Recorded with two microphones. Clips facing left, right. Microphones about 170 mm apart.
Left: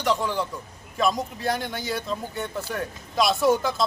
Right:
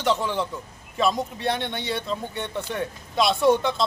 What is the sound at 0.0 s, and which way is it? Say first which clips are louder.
A man's voice: right 1 dB; centre (ahead or behind).